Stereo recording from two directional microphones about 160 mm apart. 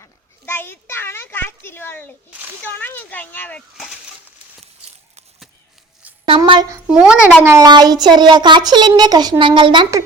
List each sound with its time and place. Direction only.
0.0 s a child's voice: 15° left (ahead or behind)
6.2 s a sound: 30° right (ahead or behind)
6.8 s speech: 5° right (ahead or behind)
7.5 s child singing: 25° right (ahead or behind)